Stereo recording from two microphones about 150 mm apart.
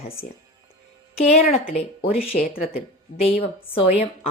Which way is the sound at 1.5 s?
45° left (ahead or behind).